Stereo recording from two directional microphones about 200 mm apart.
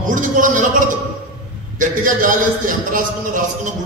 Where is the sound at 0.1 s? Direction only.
40° right (ahead or behind).